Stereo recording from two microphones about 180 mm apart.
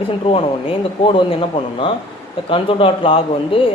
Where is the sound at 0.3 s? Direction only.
30° left (ahead or behind).